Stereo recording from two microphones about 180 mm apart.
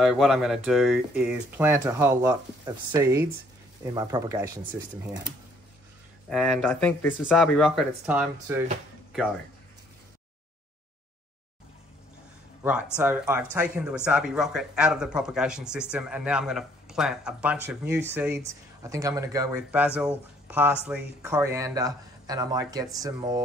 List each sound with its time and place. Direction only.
0.0 s speech: centre (ahead or behind); by 5.2 s 20° right (ahead or behind)
6.3 s speech: 5° left (ahead or behind)
12.9 s speech: 10° right (ahead or behind)